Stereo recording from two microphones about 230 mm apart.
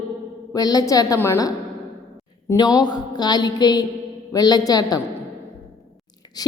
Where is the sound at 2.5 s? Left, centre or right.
Centre.